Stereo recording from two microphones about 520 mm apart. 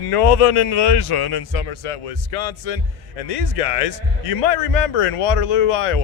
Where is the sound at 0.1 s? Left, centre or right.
Left.